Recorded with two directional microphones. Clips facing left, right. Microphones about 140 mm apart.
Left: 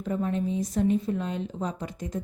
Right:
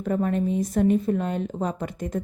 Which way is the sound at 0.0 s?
60° right (ahead or behind).